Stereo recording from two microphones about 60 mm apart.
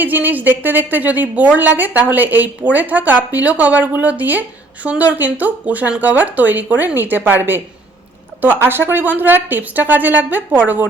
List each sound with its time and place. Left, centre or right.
0.0 s a woman's voice: right